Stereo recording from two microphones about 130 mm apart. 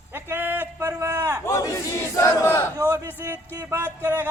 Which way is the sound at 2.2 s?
15° left (ahead or behind).